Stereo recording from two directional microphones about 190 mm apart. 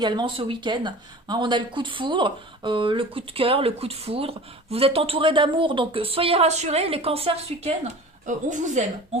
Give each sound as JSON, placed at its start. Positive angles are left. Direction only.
{"t": 0.0, "sound": "a woman's voice", "side_deg": -25}